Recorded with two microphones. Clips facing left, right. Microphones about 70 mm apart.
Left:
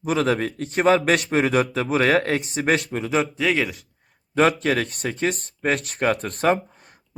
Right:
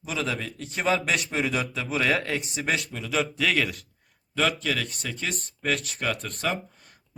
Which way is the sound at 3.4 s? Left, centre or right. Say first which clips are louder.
Left 2 dB; centre.